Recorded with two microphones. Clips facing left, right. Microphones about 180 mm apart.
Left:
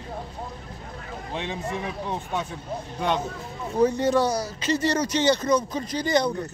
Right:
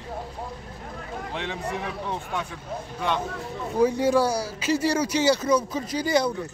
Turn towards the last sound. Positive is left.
turn(degrees=-5)  # may be behind; listen again after turning